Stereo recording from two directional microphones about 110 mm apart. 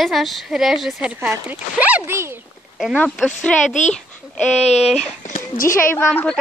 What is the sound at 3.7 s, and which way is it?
Speech, 90° left.